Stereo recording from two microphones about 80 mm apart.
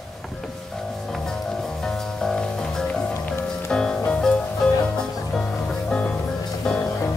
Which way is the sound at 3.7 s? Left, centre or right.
Centre.